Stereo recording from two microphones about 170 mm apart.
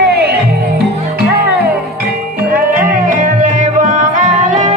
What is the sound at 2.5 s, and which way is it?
Music, 55° right (ahead or behind).